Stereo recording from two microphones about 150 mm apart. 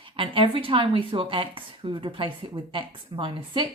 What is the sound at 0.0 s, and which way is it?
Speech, 35° right (ahead or behind).